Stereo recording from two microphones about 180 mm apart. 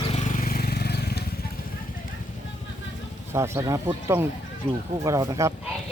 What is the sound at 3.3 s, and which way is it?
Speech, 15° right (ahead or behind).